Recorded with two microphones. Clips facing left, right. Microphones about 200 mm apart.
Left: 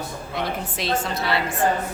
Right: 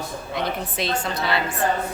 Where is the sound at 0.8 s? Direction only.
Centre (ahead or behind).